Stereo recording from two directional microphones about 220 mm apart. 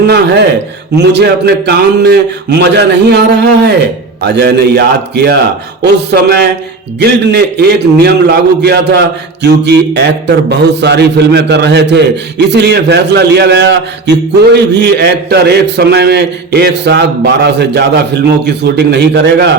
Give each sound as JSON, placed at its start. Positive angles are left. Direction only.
{"t": 0.9, "sound": "a man's voice", "side_deg": -50}